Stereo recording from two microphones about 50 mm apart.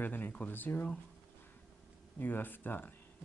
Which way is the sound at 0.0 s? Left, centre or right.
Left.